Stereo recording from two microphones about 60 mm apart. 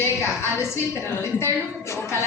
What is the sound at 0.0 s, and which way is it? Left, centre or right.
Music, left.